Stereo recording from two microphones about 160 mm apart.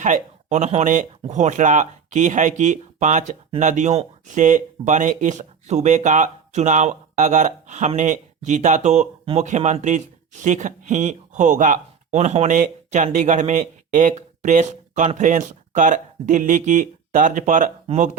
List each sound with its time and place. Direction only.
0.0 s speech: 50° right (ahead or behind)